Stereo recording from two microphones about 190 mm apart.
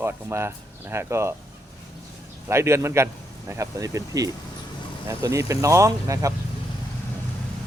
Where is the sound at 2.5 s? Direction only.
15° right (ahead or behind).